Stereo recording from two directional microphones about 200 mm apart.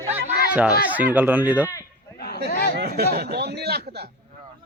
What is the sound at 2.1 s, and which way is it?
Chatter, 50° left (ahead or behind).